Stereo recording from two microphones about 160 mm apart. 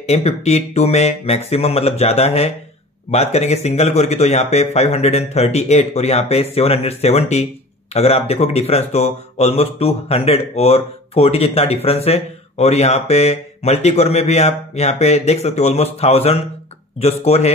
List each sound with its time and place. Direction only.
0.0 s speech: 40° left (ahead or behind)